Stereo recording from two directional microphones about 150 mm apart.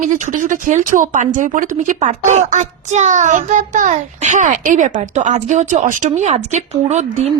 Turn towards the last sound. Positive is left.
turn(degrees=-50)  # may be behind; listen again after turning